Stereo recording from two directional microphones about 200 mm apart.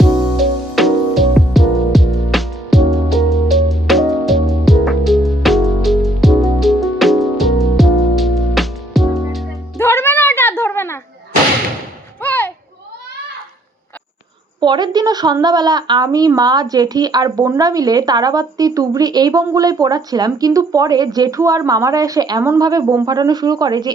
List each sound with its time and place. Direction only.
0.0 s music: centre (ahead or behind)
9.7 s music: 10° left (ahead or behind)
12.2 s children playing: 10° left (ahead or behind)
14.6 s a woman's voice: 20° right (ahead or behind)